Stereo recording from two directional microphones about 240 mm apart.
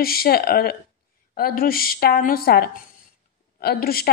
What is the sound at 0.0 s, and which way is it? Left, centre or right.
A woman's voice, left.